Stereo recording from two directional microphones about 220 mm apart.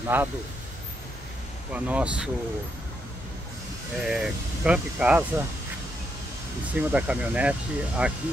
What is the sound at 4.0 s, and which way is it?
Speech, 5° right (ahead or behind).